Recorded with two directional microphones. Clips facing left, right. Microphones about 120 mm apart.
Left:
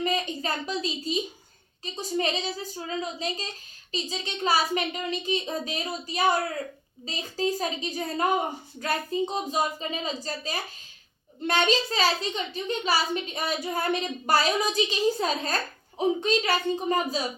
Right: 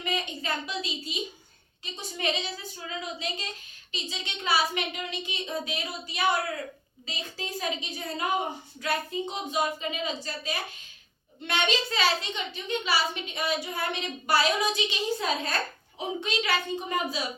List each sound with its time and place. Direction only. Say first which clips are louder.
0.0 s a child's voice: left 5 dB; 40° left (ahead or behind)